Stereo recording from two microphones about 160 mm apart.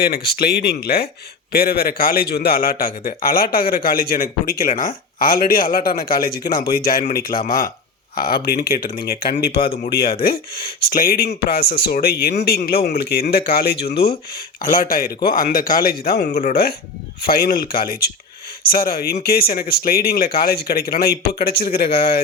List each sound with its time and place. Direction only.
0.0 s speech: 75° left (ahead or behind); by 14.1 s 90° left
14.3 s speech: 60° left (ahead or behind)